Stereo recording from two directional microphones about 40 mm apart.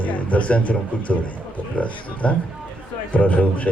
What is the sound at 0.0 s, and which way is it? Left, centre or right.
Speech, left.